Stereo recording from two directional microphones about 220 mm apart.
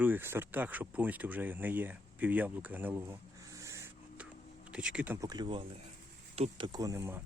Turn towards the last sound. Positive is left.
turn(degrees=-10)  # may be behind; listen again after turning